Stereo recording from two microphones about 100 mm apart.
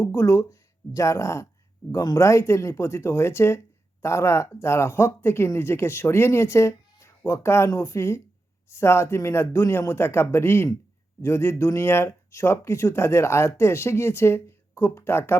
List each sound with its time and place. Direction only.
0.0 s speech: 30° left (ahead or behind)